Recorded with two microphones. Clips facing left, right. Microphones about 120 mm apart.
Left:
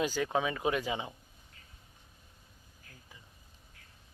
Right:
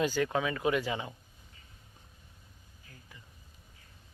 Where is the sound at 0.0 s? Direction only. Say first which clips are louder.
Right 1 dB; 10° left (ahead or behind).